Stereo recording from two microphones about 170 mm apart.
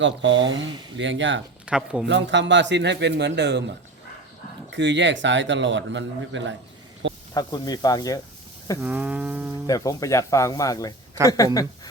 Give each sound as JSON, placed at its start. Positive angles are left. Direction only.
{"t": 0.0, "sound": "a man's voice", "side_deg": -90}
{"t": 1.6, "sound": "speech", "side_deg": -5}
{"t": 2.0, "sound": "a man's voice", "side_deg": -90}
{"t": 4.7, "sound": "a man's voice", "side_deg": -90}
{"t": 7.3, "sound": "speech", "side_deg": 25}
{"t": 8.8, "sound": "a sound", "side_deg": -10}
{"t": 9.6, "sound": "speech", "side_deg": 20}